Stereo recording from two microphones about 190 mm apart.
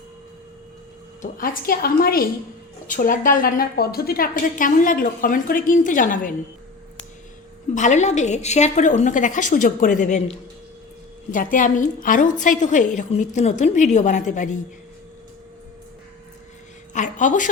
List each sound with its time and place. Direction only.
1.2 s a woman's voice: 50° left (ahead or behind)
7.8 s a woman's voice: 40° left (ahead or behind)
16.9 s a woman's voice: 40° left (ahead or behind)